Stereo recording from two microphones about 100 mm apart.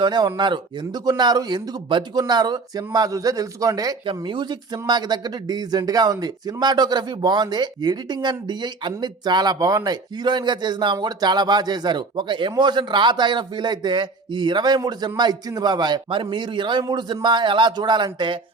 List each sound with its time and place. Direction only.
0.0 s speech: 45° right (ahead or behind)
4.0 s speech: 55° right (ahead or behind)